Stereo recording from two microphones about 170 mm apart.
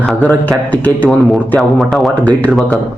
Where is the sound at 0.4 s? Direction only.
10° left (ahead or behind).